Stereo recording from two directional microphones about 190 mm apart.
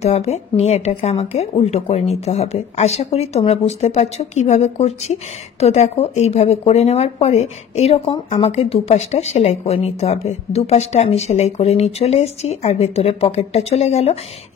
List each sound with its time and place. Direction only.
0.0 s speech: 35° left (ahead or behind)